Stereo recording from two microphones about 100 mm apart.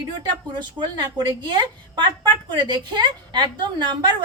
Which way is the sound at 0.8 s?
50° right (ahead or behind).